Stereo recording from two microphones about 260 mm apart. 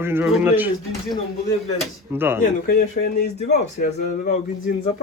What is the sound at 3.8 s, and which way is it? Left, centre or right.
Speech, left.